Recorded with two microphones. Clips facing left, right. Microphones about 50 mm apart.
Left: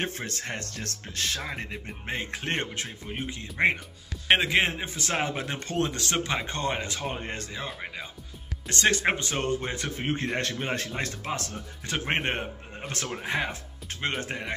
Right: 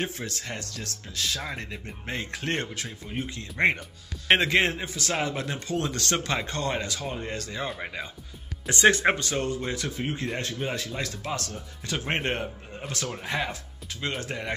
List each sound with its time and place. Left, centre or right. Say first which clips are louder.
0.0 s speech: even; left
1.6 s speech: left 1 dB; centre
3.5 s a man's voice: right 1 dB; centre
4.8 s speech: even; left
7.5 s speech: right 3 dB; centre
8.6 s speech: right 5 dB; centre
9.1 s speech: right 1 dB; left
9.4 s speech: even; left
10.9 s a man's voice: even; left; by 13.5 s centre
13.5 s speech: even; left